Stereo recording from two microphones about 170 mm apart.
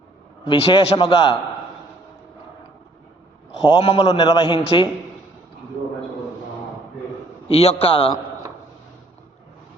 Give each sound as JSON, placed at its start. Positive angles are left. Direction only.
{"t": 0.4, "sound": "a man's voice", "side_deg": 30}
{"t": 3.6, "sound": "a man's voice", "side_deg": 35}
{"t": 7.4, "sound": "a man's voice", "side_deg": 35}